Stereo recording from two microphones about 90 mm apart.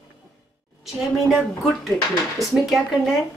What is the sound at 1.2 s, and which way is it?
Speech, centre (ahead or behind).